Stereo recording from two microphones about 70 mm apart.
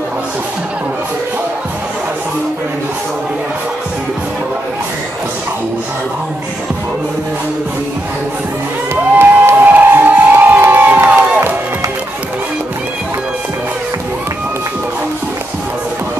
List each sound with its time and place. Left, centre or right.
9.2 s crowd: right